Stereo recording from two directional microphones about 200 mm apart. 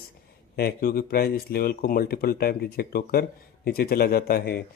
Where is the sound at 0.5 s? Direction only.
50° left (ahead or behind).